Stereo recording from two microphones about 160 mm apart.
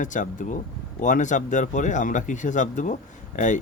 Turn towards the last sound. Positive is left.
turn(degrees=50)  # may be behind; listen again after turning